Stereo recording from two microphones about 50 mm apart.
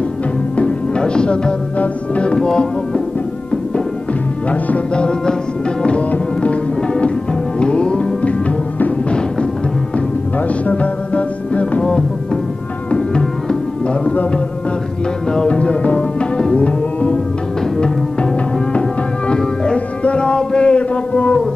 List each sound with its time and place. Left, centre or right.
0.6 s music: left
4.9 s music: centre
10.7 s music: left
12.9 s music: centre
15.3 s music: centre
18.8 s music: centre